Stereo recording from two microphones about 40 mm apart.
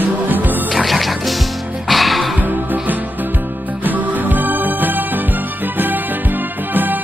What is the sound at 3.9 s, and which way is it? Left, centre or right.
Music, right.